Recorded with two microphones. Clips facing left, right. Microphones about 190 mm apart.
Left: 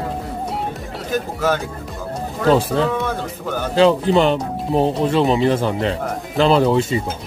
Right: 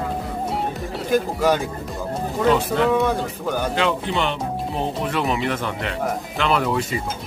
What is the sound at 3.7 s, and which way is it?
Speech, 35° left (ahead or behind).